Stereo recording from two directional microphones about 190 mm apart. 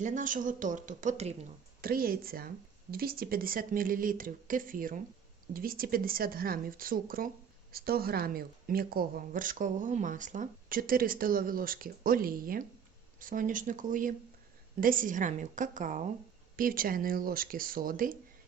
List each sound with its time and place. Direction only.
0.0 s speech: 40° right (ahead or behind)
1.8 s speech: 50° right (ahead or behind)